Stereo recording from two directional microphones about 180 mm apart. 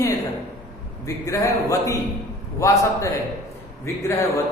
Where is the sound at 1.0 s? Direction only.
15° left (ahead or behind).